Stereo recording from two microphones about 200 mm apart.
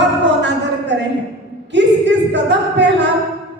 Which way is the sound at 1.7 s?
60° right (ahead or behind).